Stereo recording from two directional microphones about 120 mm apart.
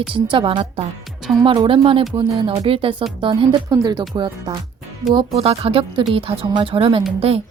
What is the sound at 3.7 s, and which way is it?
Speech, 30° right (ahead or behind).